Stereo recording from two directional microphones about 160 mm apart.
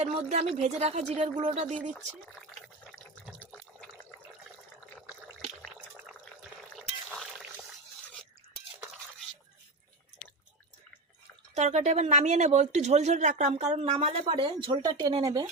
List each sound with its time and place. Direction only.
0.0 s speech: 40° right (ahead or behind)
3.4 s water: 10° left (ahead or behind)
5.6 s liquid: 5° right (ahead or behind)
6.7 s pour: centre (ahead or behind)
11.5 s speech: 45° right (ahead or behind); by 15.4 s 25° right (ahead or behind)